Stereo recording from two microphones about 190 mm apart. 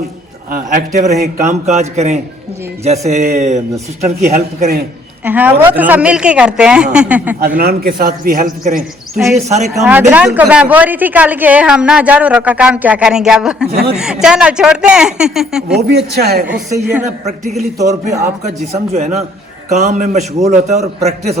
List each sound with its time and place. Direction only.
0.5 s a man's voice: 45° right (ahead or behind)
5.2 s a woman's voice: 10° right (ahead or behind)
7.3 s a man's voice: 50° right (ahead or behind)
10.1 s a woman's voice: 10° right (ahead or behind)
13.7 s a man's voice: 55° right (ahead or behind)
13.9 s speech: 5° right (ahead or behind)
15.9 s a man's voice: 55° right (ahead or behind)
16.6 s a woman's voice: 15° right (ahead or behind)
17.0 s a man's voice: 35° right (ahead or behind)